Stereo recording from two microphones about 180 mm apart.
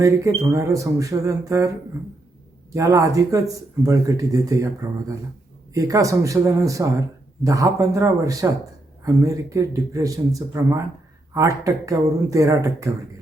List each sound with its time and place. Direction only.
0.5 s speech: 15° right (ahead or behind)
2.7 s speech: 20° right (ahead or behind)